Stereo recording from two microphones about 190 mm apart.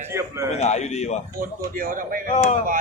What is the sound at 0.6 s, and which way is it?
Speech, 35° left (ahead or behind).